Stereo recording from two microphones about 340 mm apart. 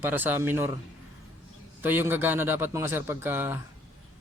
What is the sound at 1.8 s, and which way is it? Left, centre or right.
Speech, centre.